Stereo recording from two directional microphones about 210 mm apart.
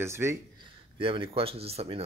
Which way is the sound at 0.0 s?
10° right (ahead or behind).